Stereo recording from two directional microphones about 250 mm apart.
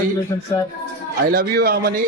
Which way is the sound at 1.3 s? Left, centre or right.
Right.